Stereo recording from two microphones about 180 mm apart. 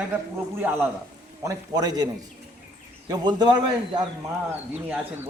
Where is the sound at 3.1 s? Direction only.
25° right (ahead or behind).